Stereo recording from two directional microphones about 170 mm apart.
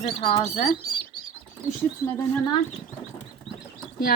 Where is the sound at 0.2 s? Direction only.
35° left (ahead or behind).